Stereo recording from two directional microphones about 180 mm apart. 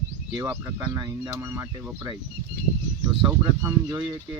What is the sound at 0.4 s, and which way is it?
Speech, 10° right (ahead or behind).